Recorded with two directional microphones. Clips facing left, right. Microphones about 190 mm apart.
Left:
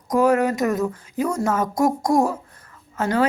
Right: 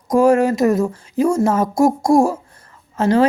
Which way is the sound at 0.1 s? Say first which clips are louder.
Right 5 dB; 30° right (ahead or behind).